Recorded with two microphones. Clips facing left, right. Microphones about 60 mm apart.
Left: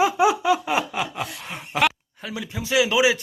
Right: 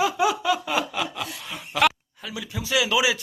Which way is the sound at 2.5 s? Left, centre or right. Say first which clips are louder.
Left 3 dB; left.